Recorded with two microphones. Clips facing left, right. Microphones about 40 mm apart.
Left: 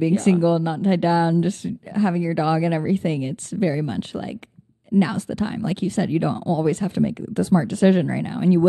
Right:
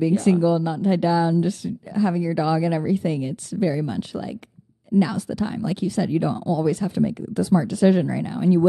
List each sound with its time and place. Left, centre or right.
0.0 s speech: left